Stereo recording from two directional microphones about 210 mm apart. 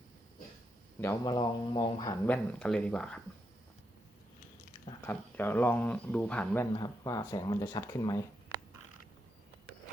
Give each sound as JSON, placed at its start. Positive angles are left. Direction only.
{"t": 1.2, "sound": "speech", "side_deg": 20}
{"t": 2.2, "sound": "speech", "side_deg": 5}
{"t": 5.0, "sound": "speech", "side_deg": 10}
{"t": 6.7, "sound": "speech", "side_deg": 20}